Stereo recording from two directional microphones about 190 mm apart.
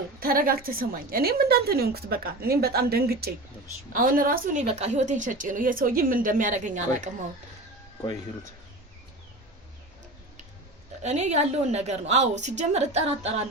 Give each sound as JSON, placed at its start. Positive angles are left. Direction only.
{"t": 0.2, "sound": "a woman's voice", "side_deg": -50}
{"t": 4.6, "sound": "speech", "side_deg": -35}
{"t": 11.0, "sound": "a woman's voice", "side_deg": -35}